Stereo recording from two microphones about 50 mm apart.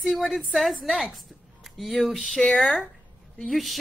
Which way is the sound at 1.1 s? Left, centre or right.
Centre.